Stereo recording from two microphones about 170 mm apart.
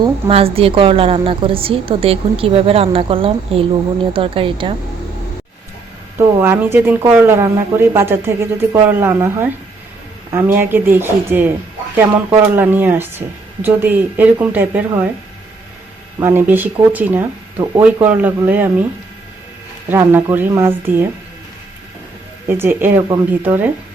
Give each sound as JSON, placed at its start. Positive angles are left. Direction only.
{"t": 0.3, "sound": "a woman's voice", "side_deg": -35}
{"t": 6.1, "sound": "speech", "side_deg": -15}
{"t": 16.2, "sound": "speech", "side_deg": -10}
{"t": 19.9, "sound": "speech", "side_deg": -15}
{"t": 22.4, "sound": "speech", "side_deg": -15}